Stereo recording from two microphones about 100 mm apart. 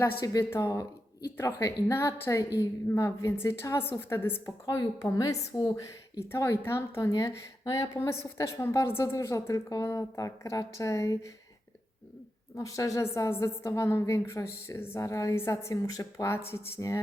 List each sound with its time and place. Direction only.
0.0 s a woman's voice: 25° left (ahead or behind)
4.8 s a woman's voice: 40° left (ahead or behind)
6.2 s a woman's voice: 25° left (ahead or behind)
12.5 s a woman's voice: 35° left (ahead or behind)